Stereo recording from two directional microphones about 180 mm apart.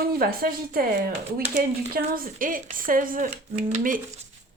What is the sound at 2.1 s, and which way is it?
A woman's voice, 50° right (ahead or behind).